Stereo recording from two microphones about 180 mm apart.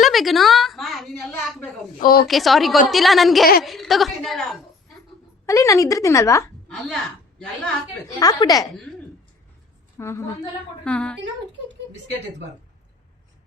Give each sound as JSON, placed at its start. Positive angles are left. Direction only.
{"t": 0.0, "sound": "a sound", "side_deg": 0}
{"t": 2.0, "sound": "a woman's voice", "side_deg": 55}
{"t": 2.2, "sound": "a woman's voice", "side_deg": 0}
{"t": 5.5, "sound": "speech", "side_deg": 15}
{"t": 6.8, "sound": "a woman's voice", "side_deg": 5}
{"t": 8.2, "sound": "a woman's voice", "side_deg": 20}
{"t": 10.0, "sound": "speech", "side_deg": 15}